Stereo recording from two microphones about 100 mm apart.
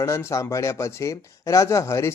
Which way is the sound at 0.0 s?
30° left (ahead or behind).